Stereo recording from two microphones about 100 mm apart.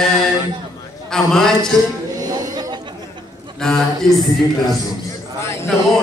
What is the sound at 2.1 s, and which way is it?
Chatter, 40° right (ahead or behind).